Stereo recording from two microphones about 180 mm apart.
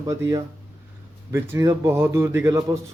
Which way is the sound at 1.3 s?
15° right (ahead or behind).